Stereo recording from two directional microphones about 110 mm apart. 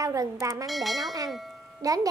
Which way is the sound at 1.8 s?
30° right (ahead or behind).